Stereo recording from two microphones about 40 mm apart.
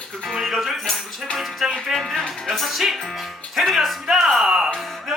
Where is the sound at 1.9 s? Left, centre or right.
Centre.